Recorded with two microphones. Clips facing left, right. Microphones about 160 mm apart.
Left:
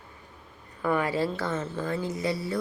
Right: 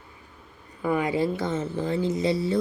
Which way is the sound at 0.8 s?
15° right (ahead or behind).